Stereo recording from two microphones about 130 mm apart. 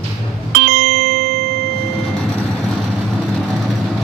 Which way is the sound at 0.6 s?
75° right (ahead or behind).